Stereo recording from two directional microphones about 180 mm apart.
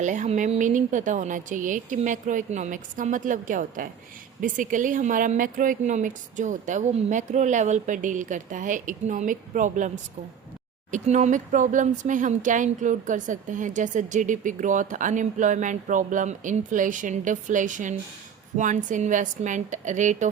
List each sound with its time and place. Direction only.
0.0 s speech: 45° right (ahead or behind)